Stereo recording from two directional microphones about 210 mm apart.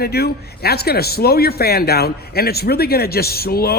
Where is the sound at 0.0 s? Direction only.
50° left (ahead or behind).